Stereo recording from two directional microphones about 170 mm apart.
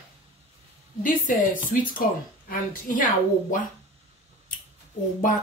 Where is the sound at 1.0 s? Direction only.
50° left (ahead or behind).